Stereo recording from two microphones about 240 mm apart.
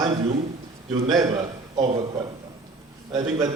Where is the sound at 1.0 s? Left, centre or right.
Centre.